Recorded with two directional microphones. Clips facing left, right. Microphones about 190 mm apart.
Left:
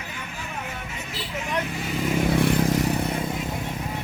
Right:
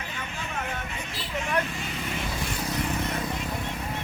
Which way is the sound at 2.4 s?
55° left (ahead or behind).